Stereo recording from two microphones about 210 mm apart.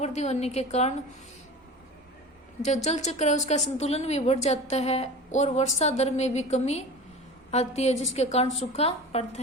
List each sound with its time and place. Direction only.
0.0 s a woman's voice: 30° left (ahead or behind)
2.6 s a woman's voice: 35° left (ahead or behind)